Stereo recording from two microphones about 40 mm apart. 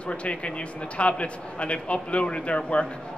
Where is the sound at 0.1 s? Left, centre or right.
Left.